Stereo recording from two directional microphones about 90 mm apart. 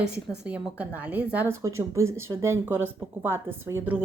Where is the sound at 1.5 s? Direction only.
35° right (ahead or behind).